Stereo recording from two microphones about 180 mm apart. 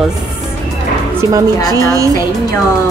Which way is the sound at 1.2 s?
15° right (ahead or behind).